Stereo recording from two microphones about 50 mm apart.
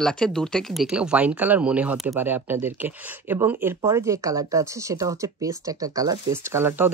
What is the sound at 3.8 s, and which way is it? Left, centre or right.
Speech, right.